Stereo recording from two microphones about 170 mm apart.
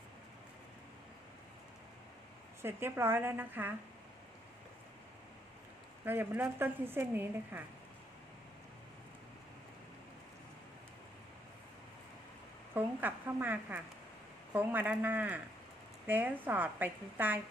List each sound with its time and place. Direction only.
2.6 s a woman's voice: 15° right (ahead or behind)
6.1 s a woman's voice: 10° right (ahead or behind)
12.7 s a woman's voice: 10° right (ahead or behind)